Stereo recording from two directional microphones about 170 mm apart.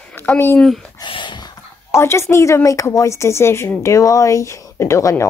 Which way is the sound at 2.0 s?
15° left (ahead or behind).